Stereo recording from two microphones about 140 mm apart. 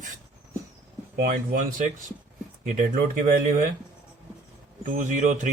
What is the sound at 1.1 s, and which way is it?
Speech, 75° right (ahead or behind).